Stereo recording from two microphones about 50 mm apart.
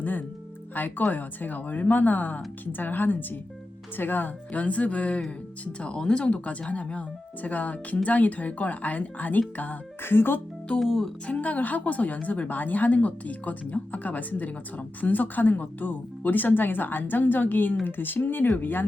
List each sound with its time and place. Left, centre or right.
0.0 s speech: left
10.0 s speech: left
10.8 s speech: centre
11.3 s speech: left